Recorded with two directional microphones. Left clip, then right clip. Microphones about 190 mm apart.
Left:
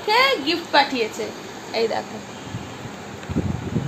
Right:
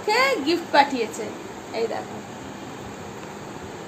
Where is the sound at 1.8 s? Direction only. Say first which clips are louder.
Left 4 dB; 40° left (ahead or behind).